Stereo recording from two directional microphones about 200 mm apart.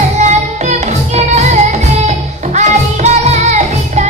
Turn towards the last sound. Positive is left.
turn(degrees=-35)  # may be behind; listen again after turning